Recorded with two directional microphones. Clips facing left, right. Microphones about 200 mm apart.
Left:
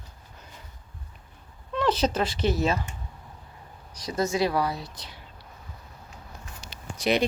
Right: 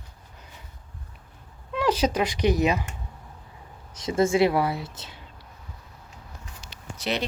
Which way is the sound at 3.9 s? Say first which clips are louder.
Right 5 dB; 25° right (ahead or behind).